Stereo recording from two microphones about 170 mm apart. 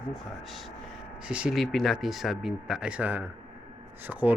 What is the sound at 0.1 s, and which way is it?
Speech, centre (ahead or behind).